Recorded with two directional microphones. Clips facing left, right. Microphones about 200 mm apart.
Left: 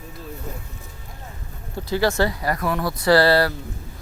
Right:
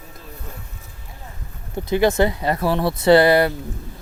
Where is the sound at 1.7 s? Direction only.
20° right (ahead or behind).